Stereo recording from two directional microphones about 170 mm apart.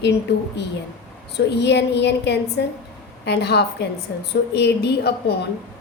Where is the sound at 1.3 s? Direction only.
90° left.